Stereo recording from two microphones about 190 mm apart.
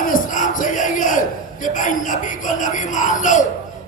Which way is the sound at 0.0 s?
45° left (ahead or behind).